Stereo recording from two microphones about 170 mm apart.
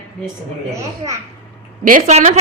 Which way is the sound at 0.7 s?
20° right (ahead or behind).